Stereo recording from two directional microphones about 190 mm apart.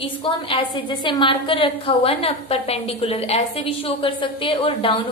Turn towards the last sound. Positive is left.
turn(degrees=30)  # may be behind; listen again after turning